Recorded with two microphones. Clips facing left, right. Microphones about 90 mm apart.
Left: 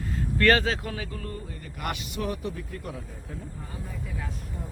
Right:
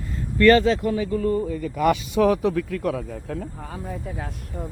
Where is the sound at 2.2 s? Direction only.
90° right.